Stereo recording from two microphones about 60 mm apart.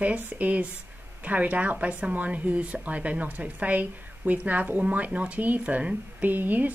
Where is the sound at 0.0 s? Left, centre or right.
Right.